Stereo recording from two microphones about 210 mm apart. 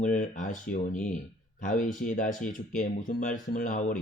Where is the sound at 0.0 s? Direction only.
40° left (ahead or behind).